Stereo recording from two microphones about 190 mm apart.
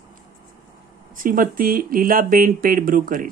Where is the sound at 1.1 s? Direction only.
45° right (ahead or behind).